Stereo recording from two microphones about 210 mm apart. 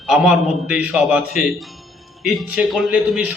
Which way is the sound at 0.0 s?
5° right (ahead or behind).